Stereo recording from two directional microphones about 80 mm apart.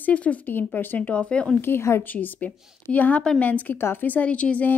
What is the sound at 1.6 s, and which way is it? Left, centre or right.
Speech, left.